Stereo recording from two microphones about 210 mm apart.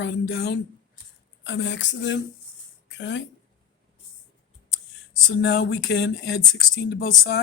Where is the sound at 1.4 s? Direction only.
60° left (ahead or behind).